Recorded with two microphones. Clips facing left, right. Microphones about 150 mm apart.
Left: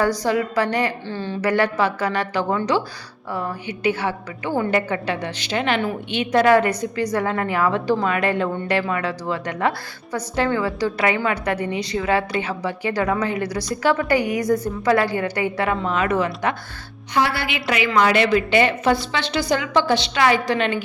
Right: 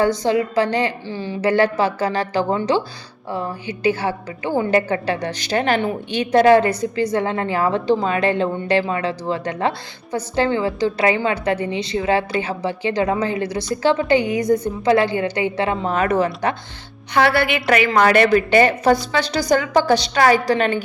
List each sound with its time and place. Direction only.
0.0 s a woman's voice: 25° right (ahead or behind)
1.0 s speech: 15° right (ahead or behind)
1.4 s a woman's voice: 30° right (ahead or behind)
15.9 s a woman's voice: 40° right (ahead or behind)
17.2 s a woman's voice: 65° right (ahead or behind); by 20.8 s 40° right (ahead or behind)